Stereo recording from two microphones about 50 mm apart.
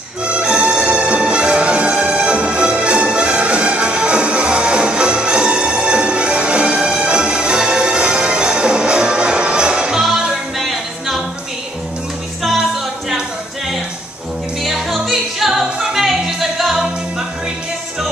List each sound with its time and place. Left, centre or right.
0.2 s music: right
14.6 s music: centre